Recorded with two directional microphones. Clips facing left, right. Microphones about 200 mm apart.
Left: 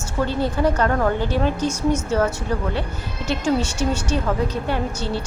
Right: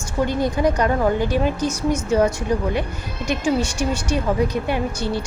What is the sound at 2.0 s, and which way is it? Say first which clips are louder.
A woman's voice: right 3 dB; 15° right (ahead or behind).